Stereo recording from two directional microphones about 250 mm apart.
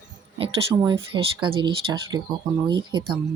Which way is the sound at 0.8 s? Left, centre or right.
Centre.